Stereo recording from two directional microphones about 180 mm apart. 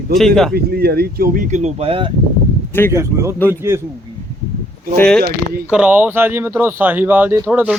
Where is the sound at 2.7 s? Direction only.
10° left (ahead or behind).